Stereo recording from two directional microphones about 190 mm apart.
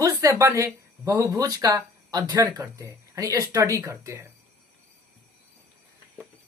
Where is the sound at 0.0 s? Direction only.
15° right (ahead or behind).